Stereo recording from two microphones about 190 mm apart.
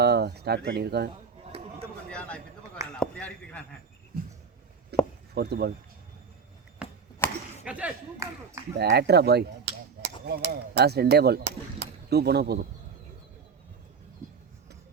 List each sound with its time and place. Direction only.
0.0 s speech: 60° right (ahead or behind)
1.5 s a sound: 30° right (ahead or behind)
2.0 s a sound: 5° left (ahead or behind)
4.9 s chopping: 60° right (ahead or behind)
5.3 s speech: 60° right (ahead or behind)
6.8 s chop: 5° right (ahead or behind)
7.6 s speech: 5° right (ahead or behind)
8.8 s speech: 60° right (ahead or behind)